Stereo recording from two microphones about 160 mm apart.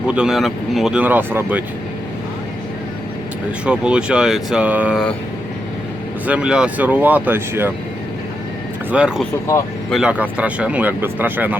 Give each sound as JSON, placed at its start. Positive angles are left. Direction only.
{"t": 0.1, "sound": "speech", "side_deg": -5}
{"t": 3.7, "sound": "speech", "side_deg": -5}
{"t": 6.2, "sound": "speech", "side_deg": -5}
{"t": 8.9, "sound": "speech", "side_deg": -5}